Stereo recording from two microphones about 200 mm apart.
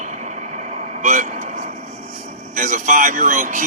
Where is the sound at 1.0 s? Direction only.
40° right (ahead or behind).